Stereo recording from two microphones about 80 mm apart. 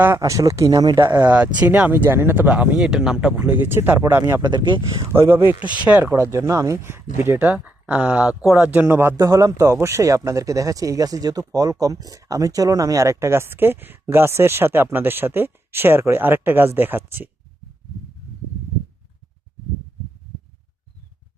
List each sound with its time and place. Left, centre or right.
0.2 s speech: right
1.0 s speech: right; by 3.5 s centre
3.5 s speech: right
4.4 s speech: right
5.1 s speech: right
5.5 s speech: centre
6.1 s speech: right
7.3 s speech: centre
9.0 s speech: right